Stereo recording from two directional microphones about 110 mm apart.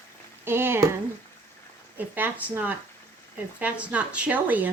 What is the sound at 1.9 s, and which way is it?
Speech, 15° right (ahead or behind).